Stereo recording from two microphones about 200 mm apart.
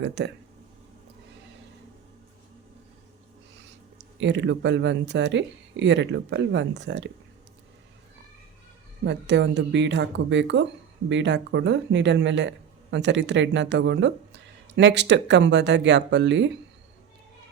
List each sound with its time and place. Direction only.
0.0 s speech: 60° right (ahead or behind)
3.9 s speech: 60° right (ahead or behind)
9.0 s speech: 60° right (ahead or behind)